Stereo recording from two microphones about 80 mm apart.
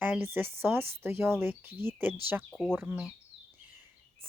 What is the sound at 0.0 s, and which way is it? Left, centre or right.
Speech, right.